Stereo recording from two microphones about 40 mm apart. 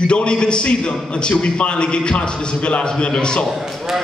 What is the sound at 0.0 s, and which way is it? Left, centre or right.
A man's voice, left.